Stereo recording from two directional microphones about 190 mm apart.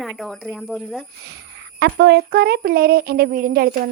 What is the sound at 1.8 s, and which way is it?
Speech, 60° right (ahead or behind).